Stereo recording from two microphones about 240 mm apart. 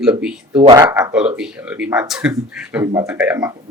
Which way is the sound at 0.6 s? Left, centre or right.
Right.